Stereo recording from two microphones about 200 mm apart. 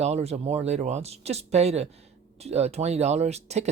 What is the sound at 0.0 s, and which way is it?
Speech, 30° right (ahead or behind).